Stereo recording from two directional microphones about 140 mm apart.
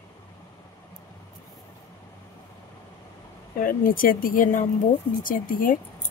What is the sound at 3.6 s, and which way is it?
Speech, 85° left.